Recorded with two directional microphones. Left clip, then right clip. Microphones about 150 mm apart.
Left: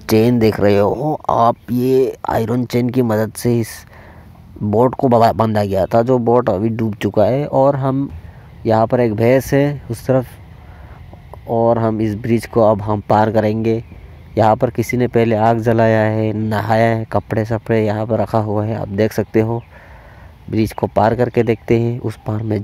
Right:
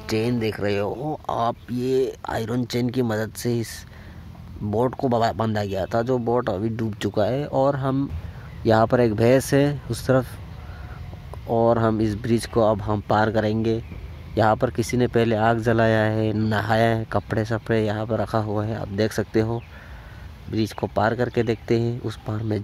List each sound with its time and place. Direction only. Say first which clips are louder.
0.0 s speech: left 11 dB; 45° left (ahead or behind); by 7.9 s 25° left (ahead or behind)
8.6 s speech: left 4 dB; 15° left (ahead or behind)
11.4 s speech: left 5 dB; 15° left (ahead or behind)